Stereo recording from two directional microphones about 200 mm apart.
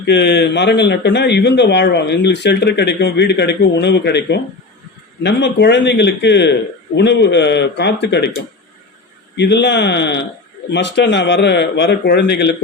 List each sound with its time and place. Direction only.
0.0 s a man's voice: 55° left (ahead or behind)